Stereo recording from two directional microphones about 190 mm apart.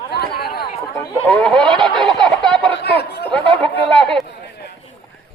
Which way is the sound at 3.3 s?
5° left (ahead or behind).